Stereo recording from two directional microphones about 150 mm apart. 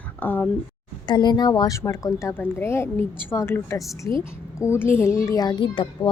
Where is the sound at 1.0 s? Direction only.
30° left (ahead or behind).